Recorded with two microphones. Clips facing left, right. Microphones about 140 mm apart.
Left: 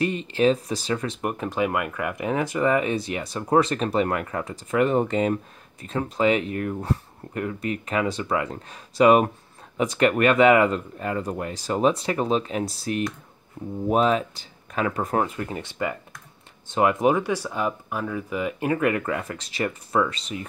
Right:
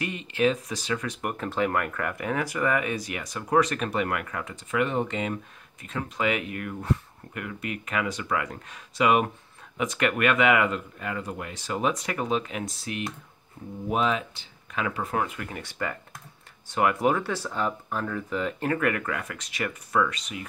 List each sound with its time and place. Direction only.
0.0 s speech: 35° left (ahead or behind)
1.2 s speech: 15° left (ahead or behind)